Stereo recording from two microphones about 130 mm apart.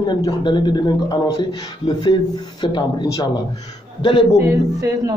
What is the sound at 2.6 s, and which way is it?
Speech, 35° left (ahead or behind).